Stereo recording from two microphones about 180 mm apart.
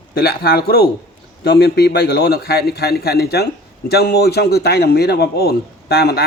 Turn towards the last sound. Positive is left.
turn(degrees=60)  # may be behind; listen again after turning